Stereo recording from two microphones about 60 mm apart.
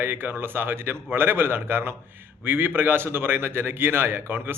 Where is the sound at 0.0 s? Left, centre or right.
Right.